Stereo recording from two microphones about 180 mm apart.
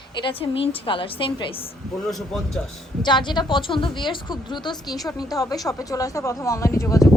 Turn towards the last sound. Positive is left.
turn(degrees=20)  # may be behind; listen again after turning